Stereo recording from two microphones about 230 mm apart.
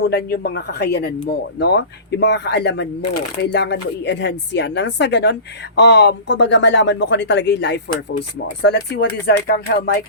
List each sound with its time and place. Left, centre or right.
0.0 s speech: left